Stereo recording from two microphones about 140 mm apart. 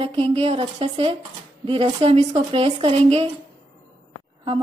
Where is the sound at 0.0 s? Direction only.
40° right (ahead or behind).